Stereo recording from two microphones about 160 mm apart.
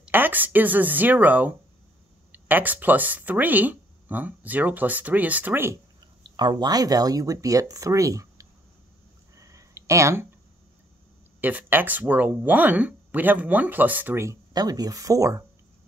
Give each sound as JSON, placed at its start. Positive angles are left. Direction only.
{"t": 0.0, "sound": "speech", "side_deg": -10}
{"t": 6.3, "sound": "speech", "side_deg": -25}
{"t": 9.4, "sound": "a sound", "side_deg": -20}
{"t": 11.4, "sound": "speech", "side_deg": -10}